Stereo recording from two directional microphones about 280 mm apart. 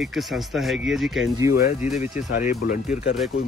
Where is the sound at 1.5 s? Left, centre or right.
Left.